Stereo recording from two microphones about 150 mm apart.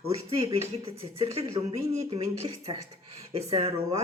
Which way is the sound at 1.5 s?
20° right (ahead or behind).